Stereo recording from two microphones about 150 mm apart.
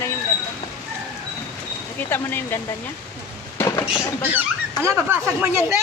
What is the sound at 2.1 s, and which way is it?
Speech, 15° left (ahead or behind).